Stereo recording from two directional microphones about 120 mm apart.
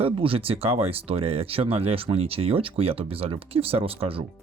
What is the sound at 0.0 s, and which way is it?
Speech, 50° right (ahead or behind).